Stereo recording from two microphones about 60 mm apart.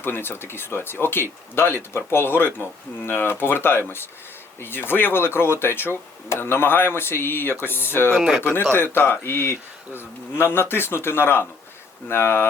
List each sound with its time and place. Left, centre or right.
0.0 s speech: left